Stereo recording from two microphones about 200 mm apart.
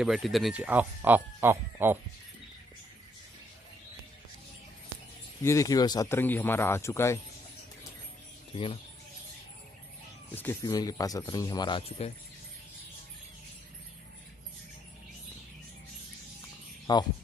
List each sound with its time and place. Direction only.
0.0 s speech: centre (ahead or behind)
5.4 s speech: 15° left (ahead or behind)
10.3 s speech: 10° left (ahead or behind)
16.9 s speech: 20° left (ahead or behind)